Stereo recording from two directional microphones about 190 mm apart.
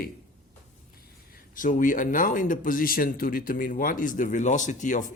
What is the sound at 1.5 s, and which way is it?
Speech, 45° left (ahead or behind).